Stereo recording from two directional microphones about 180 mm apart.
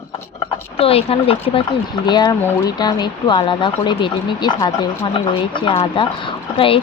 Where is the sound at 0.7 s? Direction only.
30° left (ahead or behind).